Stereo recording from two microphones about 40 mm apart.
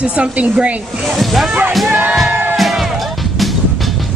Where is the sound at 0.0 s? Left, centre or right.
Right.